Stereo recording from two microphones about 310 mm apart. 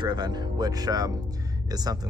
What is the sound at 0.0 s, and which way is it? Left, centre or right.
A man's voice, centre.